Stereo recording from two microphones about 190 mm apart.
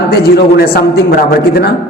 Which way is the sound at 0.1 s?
55° left (ahead or behind).